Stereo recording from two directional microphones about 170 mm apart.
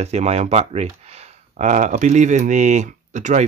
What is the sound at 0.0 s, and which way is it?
Speech, 40° right (ahead or behind).